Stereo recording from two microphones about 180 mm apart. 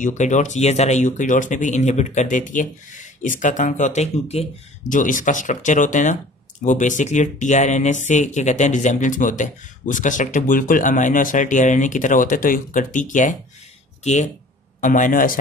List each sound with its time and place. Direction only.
0.0 s speech: 45° left (ahead or behind)
14.8 s speech: 45° left (ahead or behind)